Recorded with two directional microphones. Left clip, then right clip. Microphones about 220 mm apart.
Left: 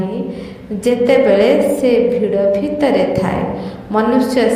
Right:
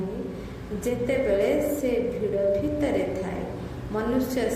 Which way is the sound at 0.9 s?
40° left (ahead or behind).